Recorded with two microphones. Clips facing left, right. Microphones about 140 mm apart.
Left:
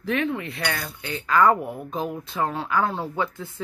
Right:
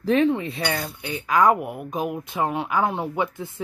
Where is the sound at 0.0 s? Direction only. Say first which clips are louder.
Right 6 dB; 30° right (ahead or behind).